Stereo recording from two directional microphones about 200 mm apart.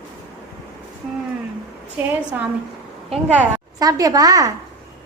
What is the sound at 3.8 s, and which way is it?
Speech, 20° right (ahead or behind).